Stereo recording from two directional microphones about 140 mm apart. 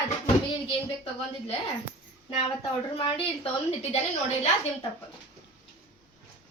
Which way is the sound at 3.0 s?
40° left (ahead or behind).